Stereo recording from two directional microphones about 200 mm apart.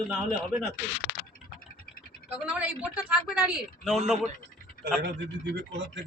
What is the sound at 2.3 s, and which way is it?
A woman's voice, 5° right (ahead or behind).